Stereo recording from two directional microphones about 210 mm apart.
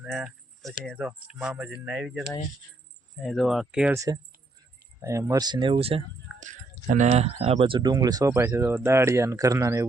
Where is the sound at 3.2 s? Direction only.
Centre (ahead or behind).